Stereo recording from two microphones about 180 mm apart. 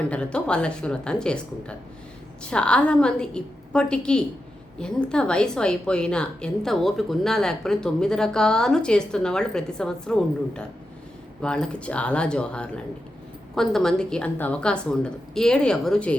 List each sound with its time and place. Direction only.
0.1 s a woman's voice: 5° left (ahead or behind)